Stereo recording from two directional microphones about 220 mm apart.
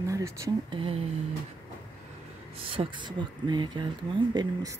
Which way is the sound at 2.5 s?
25° right (ahead or behind).